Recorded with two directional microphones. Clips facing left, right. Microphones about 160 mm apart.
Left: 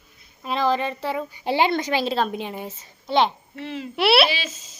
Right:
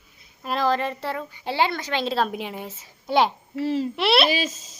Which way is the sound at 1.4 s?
15° left (ahead or behind).